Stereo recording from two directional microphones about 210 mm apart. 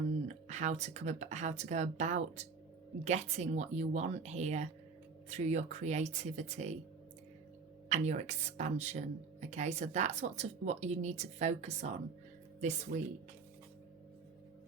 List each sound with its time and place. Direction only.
0.4 s speech: 35° right (ahead or behind)
7.9 s speech: 35° right (ahead or behind)